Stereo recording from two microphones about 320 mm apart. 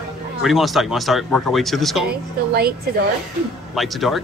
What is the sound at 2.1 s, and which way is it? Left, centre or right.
Speech, right.